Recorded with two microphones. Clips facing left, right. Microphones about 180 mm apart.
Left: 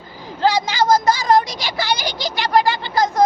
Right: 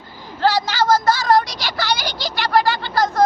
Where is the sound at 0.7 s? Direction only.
15° left (ahead or behind).